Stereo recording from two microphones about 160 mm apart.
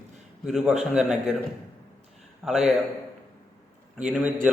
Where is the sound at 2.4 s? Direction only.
5° right (ahead or behind).